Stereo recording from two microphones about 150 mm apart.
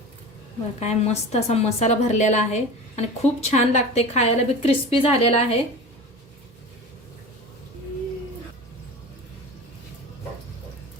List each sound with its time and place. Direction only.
0.8 s a woman's voice: 45° left (ahead or behind)